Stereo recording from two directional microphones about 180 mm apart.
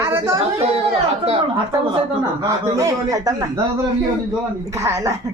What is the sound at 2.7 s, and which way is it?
Speech, 20° right (ahead or behind).